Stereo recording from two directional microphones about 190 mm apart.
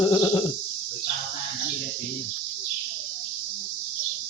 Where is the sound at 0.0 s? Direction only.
15° left (ahead or behind).